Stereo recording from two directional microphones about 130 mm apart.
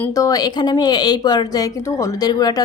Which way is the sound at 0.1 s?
25° left (ahead or behind).